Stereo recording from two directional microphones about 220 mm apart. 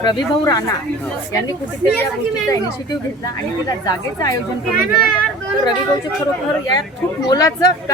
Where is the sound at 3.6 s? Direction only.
15° left (ahead or behind).